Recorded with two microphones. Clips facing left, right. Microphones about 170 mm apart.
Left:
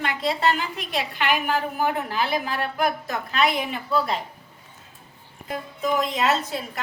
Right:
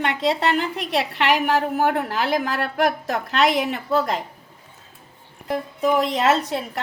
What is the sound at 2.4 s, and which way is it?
A woman's voice, 85° right.